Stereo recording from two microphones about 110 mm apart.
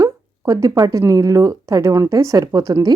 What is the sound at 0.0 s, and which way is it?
Speech, 30° right (ahead or behind).